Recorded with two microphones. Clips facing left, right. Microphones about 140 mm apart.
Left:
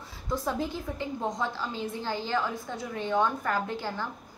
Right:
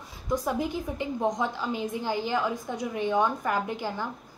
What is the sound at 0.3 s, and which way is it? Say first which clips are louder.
A woman's voice: right 3 dB; 15° right (ahead or behind).